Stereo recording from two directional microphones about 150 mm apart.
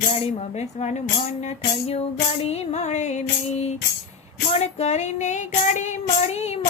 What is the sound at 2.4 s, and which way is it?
Music, 45° left (ahead or behind).